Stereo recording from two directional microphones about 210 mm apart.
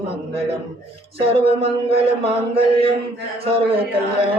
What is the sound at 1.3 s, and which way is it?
Music, 25° right (ahead or behind).